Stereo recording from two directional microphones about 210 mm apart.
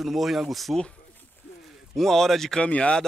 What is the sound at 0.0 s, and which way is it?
Speech, centre (ahead or behind).